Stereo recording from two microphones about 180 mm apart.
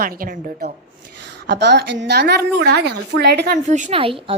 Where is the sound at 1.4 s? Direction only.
70° right (ahead or behind).